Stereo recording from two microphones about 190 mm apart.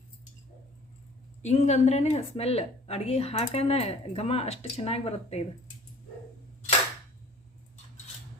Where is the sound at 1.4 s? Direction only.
35° left (ahead or behind).